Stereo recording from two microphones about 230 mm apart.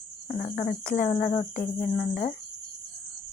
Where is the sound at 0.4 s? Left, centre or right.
Left.